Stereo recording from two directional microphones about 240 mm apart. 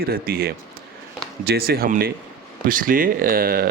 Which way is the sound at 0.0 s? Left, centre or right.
Right.